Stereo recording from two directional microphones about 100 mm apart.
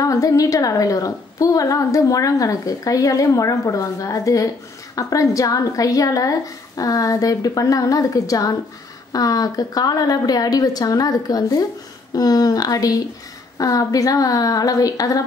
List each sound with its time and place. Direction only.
0.0 s a woman's voice: 35° left (ahead or behind)